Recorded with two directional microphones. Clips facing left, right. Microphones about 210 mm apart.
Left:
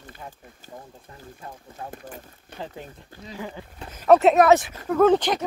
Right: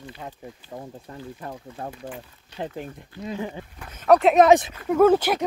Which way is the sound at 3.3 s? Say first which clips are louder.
Right 2 dB; 20° right (ahead or behind).